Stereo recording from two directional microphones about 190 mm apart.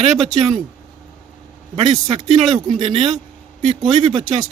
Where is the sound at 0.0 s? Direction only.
35° right (ahead or behind).